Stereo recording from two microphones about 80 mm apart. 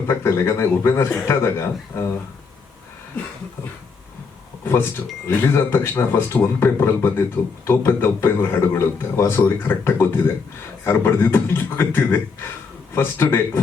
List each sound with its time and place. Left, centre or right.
0.1 s a man's voice: left
4.6 s speech: left